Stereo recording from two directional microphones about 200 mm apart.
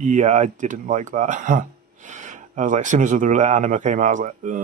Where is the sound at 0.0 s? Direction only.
35° right (ahead or behind).